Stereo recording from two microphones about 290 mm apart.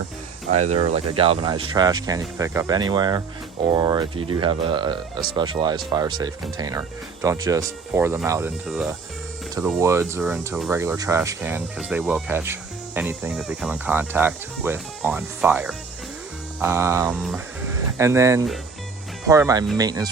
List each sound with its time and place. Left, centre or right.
0.7 s speech: right